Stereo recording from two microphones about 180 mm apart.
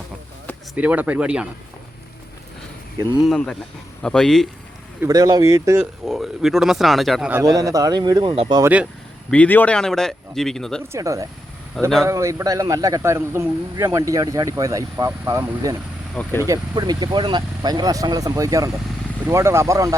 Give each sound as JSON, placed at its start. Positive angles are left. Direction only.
{"t": 0.8, "sound": "a man's voice", "side_deg": -10}
{"t": 3.2, "sound": "speech", "side_deg": 0}
{"t": 4.9, "sound": "speech", "side_deg": -20}
{"t": 5.8, "sound": "speech", "side_deg": 0}
{"t": 7.4, "sound": "speech", "side_deg": -20}
{"t": 8.6, "sound": "a man's voice", "side_deg": -5}
{"t": 9.3, "sound": "speech", "side_deg": 10}
{"t": 10.9, "sound": "a man's voice", "side_deg": -15}
{"t": 16.1, "sound": "speech", "side_deg": 10}
{"t": 16.5, "sound": "a man's voice", "side_deg": -20}